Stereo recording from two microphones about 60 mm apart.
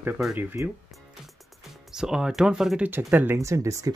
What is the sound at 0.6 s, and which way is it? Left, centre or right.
Speech, right.